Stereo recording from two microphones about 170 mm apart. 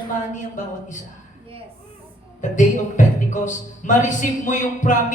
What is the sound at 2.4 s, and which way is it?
A man's voice, 45° left (ahead or behind).